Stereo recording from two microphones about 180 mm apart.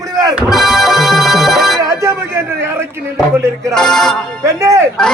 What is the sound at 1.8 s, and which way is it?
Speech, 15° right (ahead or behind).